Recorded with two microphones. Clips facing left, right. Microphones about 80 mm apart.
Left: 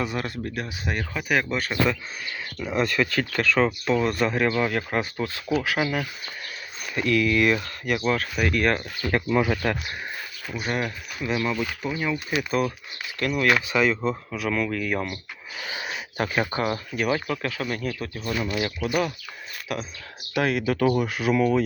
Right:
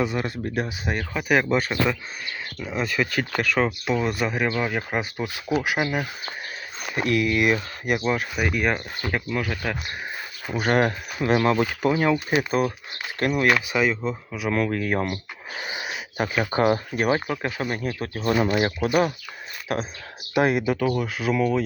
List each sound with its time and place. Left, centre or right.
0.0 s speech: centre
0.5 s speech: centre
3.0 s speech: centre
9.3 s speech: centre
10.5 s speech: right
11.8 s speech: right
13.7 s speech: centre
14.5 s speech: right
15.6 s a sound: centre
16.5 s speech: right
17.2 s speech: right
18.5 s speech: right
20.3 s speech: centre
20.9 s speech: centre